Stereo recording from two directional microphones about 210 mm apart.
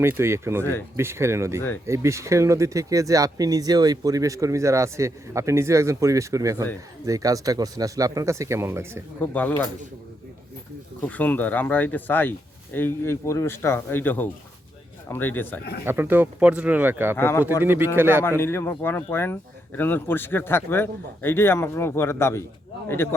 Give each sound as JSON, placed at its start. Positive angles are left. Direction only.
{"t": 0.0, "sound": "speech", "side_deg": -10}
{"t": 0.6, "sound": "speech", "side_deg": 10}
{"t": 0.9, "sound": "speech", "side_deg": -10}
{"t": 9.2, "sound": "speech", "side_deg": 10}
{"t": 11.0, "sound": "speech", "side_deg": 10}
{"t": 15.9, "sound": "speech", "side_deg": -10}
{"t": 17.2, "sound": "speech", "side_deg": 10}
{"t": 17.6, "sound": "speech", "side_deg": -10}
{"t": 18.2, "sound": "speech", "side_deg": 10}